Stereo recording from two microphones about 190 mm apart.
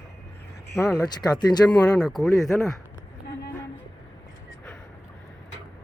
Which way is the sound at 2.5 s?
15° left (ahead or behind).